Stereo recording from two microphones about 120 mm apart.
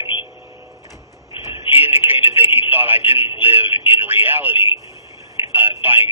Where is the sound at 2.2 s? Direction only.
50° left (ahead or behind).